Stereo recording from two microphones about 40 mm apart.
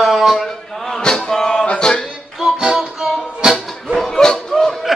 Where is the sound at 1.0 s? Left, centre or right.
Centre.